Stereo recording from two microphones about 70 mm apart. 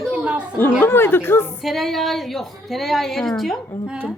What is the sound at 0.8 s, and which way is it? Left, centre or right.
Speech, left.